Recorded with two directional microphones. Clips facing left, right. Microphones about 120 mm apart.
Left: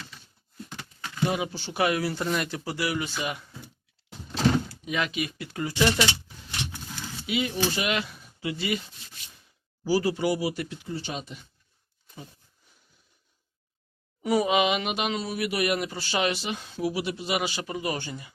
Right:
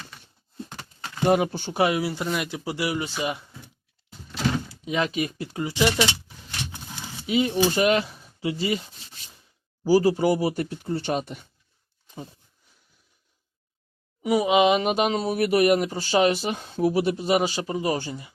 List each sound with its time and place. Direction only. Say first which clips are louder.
0.5 s a sound: right 3 dB; 30° right (ahead or behind)
1.2 s speech: right 7 dB; 50° right (ahead or behind)
1.7 s speech: right 2 dB; 25° right (ahead or behind)
4.7 s speech: right 4 dB; 30° right (ahead or behind)
7.3 s speech: right 6 dB; 35° right (ahead or behind)
9.8 s speech: right 5 dB; 40° right (ahead or behind)
14.2 s a sound: right 2 dB; 10° right (ahead or behind)
14.4 s speech: right 5 dB; 30° right (ahead or behind)